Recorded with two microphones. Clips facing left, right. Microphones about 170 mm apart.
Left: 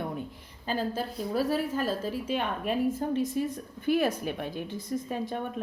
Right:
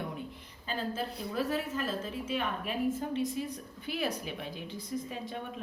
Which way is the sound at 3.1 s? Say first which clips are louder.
Left 5 dB; 50° left (ahead or behind).